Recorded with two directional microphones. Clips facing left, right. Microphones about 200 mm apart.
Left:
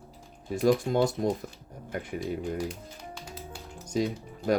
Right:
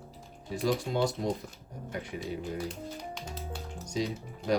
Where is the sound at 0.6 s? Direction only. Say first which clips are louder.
Left 5 dB; 50° left (ahead or behind).